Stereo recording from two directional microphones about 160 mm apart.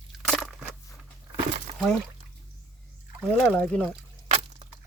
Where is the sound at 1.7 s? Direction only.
40° right (ahead or behind).